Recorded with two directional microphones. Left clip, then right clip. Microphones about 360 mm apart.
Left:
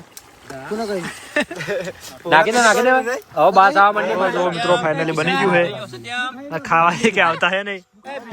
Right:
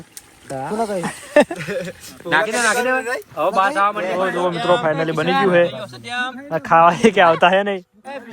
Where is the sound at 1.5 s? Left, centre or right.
Left.